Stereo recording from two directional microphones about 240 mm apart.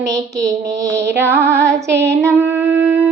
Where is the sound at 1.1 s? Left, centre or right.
Right.